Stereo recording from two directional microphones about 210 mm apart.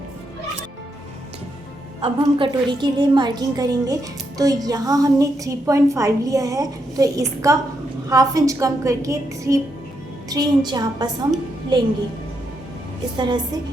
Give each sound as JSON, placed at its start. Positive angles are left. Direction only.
{"t": 2.0, "sound": "a woman's voice", "side_deg": -25}
{"t": 13.1, "sound": "a woman's voice", "side_deg": -20}